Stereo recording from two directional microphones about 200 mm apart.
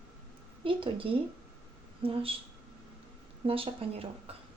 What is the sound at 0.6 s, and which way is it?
A woman's voice, 25° right (ahead or behind).